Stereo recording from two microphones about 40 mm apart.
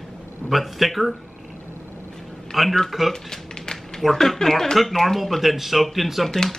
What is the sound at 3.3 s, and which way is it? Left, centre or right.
Typing, centre.